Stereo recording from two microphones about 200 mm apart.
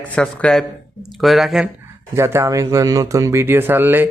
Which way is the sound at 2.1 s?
15° right (ahead or behind).